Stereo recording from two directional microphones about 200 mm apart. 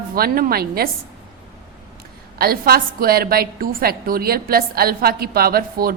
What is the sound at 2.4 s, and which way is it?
A woman's voice, 50° right (ahead or behind).